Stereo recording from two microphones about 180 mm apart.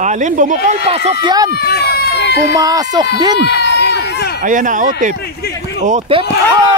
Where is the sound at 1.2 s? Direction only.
25° right (ahead or behind).